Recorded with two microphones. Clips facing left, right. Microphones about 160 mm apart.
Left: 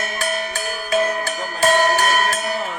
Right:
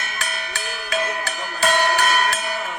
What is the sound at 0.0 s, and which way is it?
Music, 45° left (ahead or behind).